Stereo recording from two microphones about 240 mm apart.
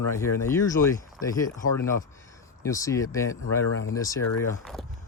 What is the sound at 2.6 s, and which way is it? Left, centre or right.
Speech, centre.